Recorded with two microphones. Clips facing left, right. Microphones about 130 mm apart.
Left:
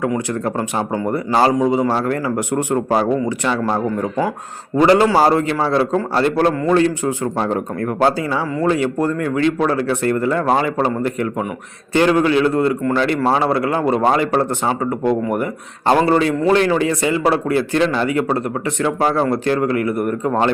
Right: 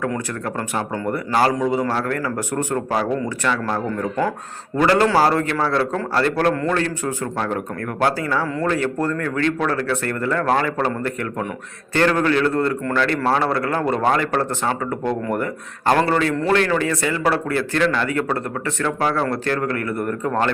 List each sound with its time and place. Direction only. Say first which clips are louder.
0.4 s a man's voice: left 4 dB; 20° left (ahead or behind)